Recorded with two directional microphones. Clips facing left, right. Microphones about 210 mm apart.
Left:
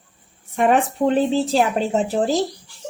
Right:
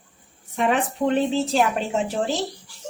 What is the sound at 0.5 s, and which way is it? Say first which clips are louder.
Speech: left 5 dB; 50° left (ahead or behind).